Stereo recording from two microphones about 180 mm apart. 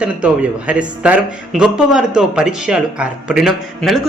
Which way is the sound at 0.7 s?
5° right (ahead or behind).